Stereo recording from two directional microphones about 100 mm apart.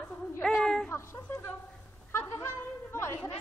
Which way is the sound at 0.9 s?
25° left (ahead or behind).